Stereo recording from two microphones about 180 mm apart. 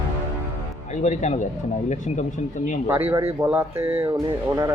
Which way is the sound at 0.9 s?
40° left (ahead or behind).